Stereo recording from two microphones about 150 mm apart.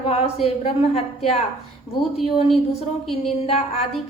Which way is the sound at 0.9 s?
45° left (ahead or behind).